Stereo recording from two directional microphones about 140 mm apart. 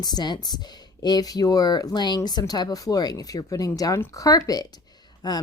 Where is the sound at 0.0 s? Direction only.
30° left (ahead or behind).